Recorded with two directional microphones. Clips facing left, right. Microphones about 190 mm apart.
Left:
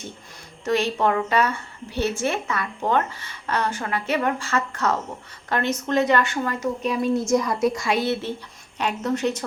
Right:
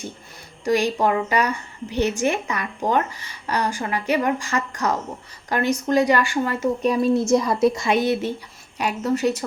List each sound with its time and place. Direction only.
0.6 s a woman's voice: 10° right (ahead or behind)
6.6 s a woman's voice: 35° right (ahead or behind); by 9.4 s 10° right (ahead or behind)